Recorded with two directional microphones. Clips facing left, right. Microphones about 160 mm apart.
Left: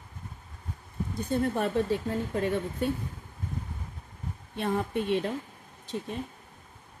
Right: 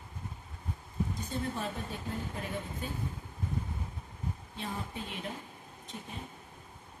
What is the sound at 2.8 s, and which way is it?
Speech, 70° left (ahead or behind).